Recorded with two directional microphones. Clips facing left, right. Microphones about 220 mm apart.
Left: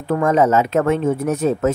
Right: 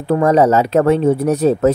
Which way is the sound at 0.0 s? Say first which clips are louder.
Right 4 dB; 35° right (ahead or behind).